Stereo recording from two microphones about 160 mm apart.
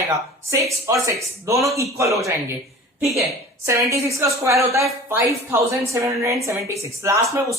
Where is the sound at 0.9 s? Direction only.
20° right (ahead or behind).